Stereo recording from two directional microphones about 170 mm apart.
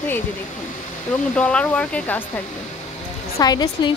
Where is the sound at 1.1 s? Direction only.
5° left (ahead or behind).